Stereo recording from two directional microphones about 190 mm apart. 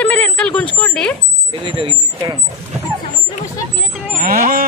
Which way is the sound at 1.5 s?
25° right (ahead or behind).